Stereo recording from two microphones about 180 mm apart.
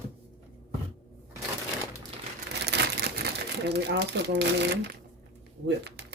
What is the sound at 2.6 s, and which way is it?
Crumpling, 70° right (ahead or behind).